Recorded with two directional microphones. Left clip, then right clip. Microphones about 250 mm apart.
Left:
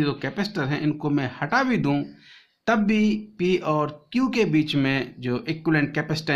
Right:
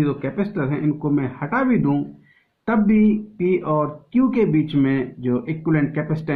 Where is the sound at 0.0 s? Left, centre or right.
Left.